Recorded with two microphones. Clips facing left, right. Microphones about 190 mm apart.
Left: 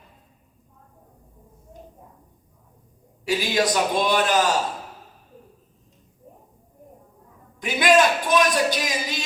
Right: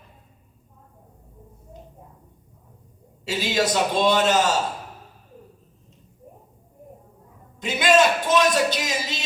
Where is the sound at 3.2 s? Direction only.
25° right (ahead or behind).